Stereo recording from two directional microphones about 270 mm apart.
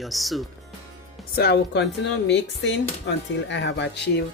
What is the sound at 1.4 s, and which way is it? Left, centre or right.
Speech, left.